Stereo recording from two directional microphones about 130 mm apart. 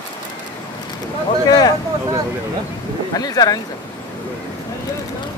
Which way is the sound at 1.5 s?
30° left (ahead or behind).